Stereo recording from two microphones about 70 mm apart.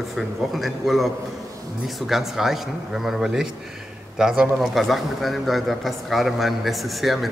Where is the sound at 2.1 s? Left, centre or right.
Centre.